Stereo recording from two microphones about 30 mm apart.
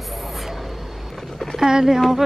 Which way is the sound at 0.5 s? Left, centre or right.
Centre.